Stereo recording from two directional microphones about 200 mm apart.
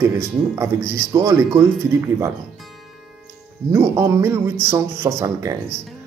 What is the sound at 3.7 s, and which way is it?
Speech, 15° right (ahead or behind).